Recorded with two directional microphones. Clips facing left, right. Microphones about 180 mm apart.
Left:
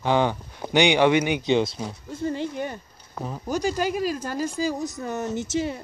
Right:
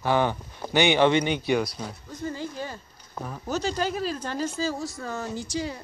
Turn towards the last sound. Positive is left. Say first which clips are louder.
# left 4 dB
turn(degrees=25)  # may be behind; listen again after turning